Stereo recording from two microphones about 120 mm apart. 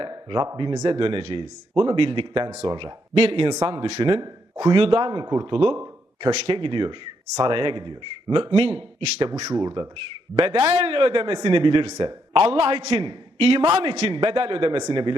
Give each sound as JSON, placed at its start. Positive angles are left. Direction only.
{"t": 0.0, "sound": "speech", "side_deg": -35}
{"t": 4.8, "sound": "speech", "side_deg": -50}
{"t": 5.2, "sound": "speech", "side_deg": -30}
{"t": 5.5, "sound": "speech", "side_deg": -45}
{"t": 5.7, "sound": "speech", "side_deg": -30}
{"t": 9.3, "sound": "speech", "side_deg": -30}
{"t": 10.3, "sound": "speech", "side_deg": -50}
{"t": 12.3, "sound": "a man's voice", "side_deg": -50}
{"t": 14.1, "sound": "speech", "side_deg": -45}